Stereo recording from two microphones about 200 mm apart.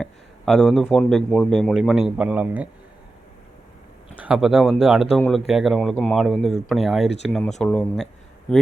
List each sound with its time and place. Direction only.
0.0 s speech: 5° left (ahead or behind)
4.2 s speech: 5° right (ahead or behind)